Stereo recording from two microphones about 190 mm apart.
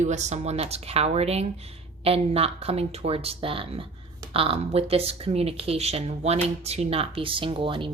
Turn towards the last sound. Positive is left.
turn(degrees=-25)  # may be behind; listen again after turning